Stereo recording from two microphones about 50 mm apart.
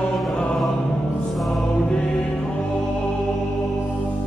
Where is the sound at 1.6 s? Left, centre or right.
Centre.